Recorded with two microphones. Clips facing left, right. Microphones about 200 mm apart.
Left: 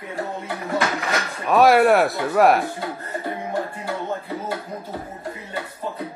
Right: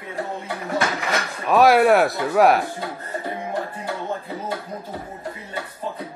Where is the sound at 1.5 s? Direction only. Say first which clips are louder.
Even; centre (ahead or behind).